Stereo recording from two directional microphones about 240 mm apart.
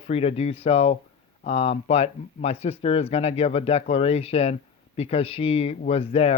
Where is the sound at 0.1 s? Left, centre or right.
Left.